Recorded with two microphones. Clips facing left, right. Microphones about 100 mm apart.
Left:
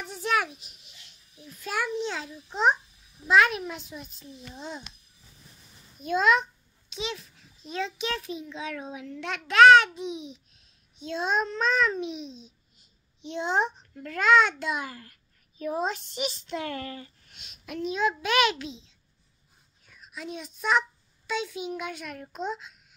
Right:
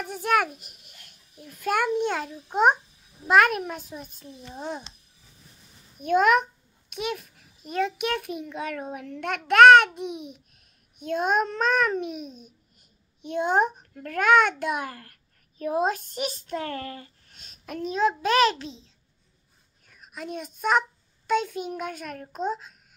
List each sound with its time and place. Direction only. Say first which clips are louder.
0.0 s a child's voice: right 4 dB; 50° right (ahead or behind)
5.9 s a child's voice: right 3 dB; 60° right (ahead or behind); by 18.9 s 35° right (ahead or behind)
19.9 s a child's voice: right 3 dB; 45° right (ahead or behind)